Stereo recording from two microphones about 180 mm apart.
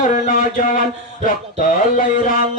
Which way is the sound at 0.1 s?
45° left (ahead or behind).